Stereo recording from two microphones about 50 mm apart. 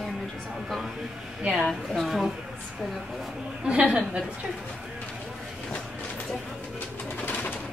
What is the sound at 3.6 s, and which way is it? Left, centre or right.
Speech, right.